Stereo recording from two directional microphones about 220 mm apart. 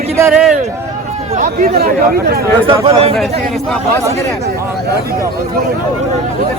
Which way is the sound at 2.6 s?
25° right (ahead or behind).